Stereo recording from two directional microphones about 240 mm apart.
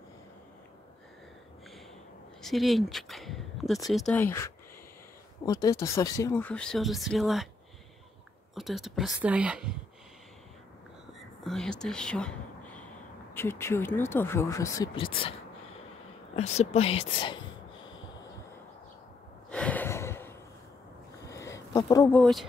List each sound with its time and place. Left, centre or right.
2.4 s a sound: centre
3.9 s speech: centre
8.5 s speech: centre
11.1 s whispering: centre
13.3 s speech: centre
16.3 s speech: left
19.5 s a sound: centre